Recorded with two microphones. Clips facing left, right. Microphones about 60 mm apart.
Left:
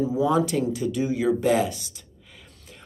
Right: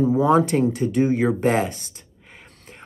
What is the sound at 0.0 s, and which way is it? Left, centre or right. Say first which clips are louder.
Speech: right 5 dB; right.